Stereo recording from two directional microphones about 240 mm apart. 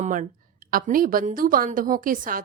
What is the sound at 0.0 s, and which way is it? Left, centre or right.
A woman's voice, right.